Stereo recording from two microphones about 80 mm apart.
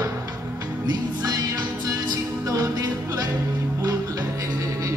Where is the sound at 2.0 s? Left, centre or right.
Right.